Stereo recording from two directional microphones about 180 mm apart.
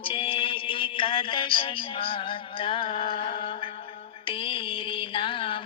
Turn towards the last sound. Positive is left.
turn(degrees=30)  # may be behind; listen again after turning